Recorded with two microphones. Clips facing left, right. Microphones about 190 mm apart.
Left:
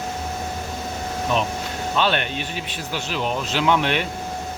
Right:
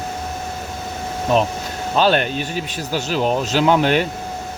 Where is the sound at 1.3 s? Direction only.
40° right (ahead or behind).